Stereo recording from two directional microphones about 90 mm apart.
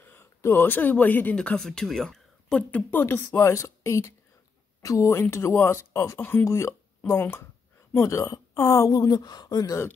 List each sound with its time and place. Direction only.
0.0 s speech: 25° left (ahead or behind); by 2.8 s 10° left (ahead or behind)
2.9 s speech: 25° left (ahead or behind)
3.3 s speech: 35° left (ahead or behind)